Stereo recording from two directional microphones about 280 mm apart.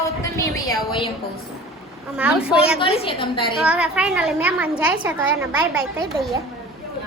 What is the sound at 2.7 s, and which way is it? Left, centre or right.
Speech, centre.